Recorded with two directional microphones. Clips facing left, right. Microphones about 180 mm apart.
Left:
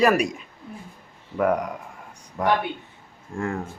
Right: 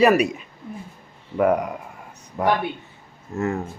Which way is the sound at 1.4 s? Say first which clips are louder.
Right 3 dB; 5° right (ahead or behind).